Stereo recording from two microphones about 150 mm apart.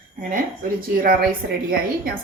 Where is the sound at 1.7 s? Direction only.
85° right.